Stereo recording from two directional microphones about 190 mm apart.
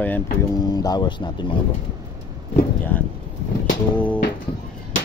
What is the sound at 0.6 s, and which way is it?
Speech, 20° left (ahead or behind).